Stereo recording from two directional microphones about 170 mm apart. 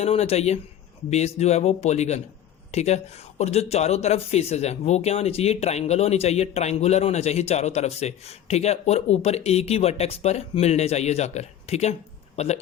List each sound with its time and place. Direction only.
0.0 s speech: 35° left (ahead or behind)